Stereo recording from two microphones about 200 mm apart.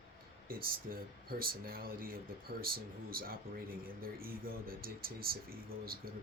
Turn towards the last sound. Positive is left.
turn(degrees=-50)  # may be behind; listen again after turning